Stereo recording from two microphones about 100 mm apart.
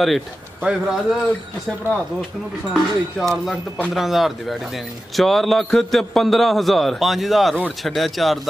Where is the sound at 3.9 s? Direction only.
Centre (ahead or behind).